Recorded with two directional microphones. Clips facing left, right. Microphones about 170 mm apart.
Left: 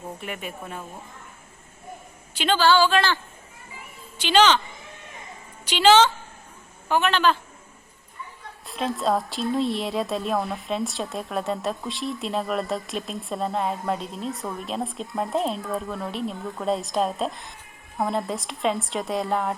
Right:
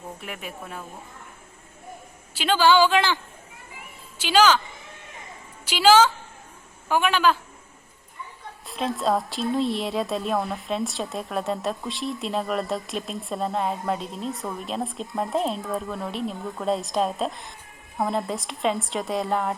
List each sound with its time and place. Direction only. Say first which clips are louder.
0.2 s a woman's voice: left 2 dB; centre (ahead or behind)
2.3 s speech: right 1 dB; 5° right (ahead or behind)
4.2 s a woman's voice: even; 5° right (ahead or behind)
5.6 s a woman's voice: even; 5° right (ahead or behind)
8.6 s a woman's voice: even; centre (ahead or behind)